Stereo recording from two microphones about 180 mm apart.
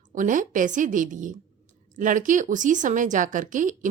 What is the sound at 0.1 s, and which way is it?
A woman's voice, 45° right (ahead or behind).